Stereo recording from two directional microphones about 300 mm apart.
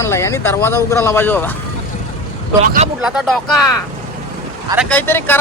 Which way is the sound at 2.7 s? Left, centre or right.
Right.